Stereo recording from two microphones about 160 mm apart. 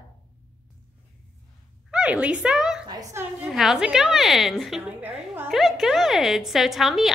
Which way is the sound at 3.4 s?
5° right (ahead or behind).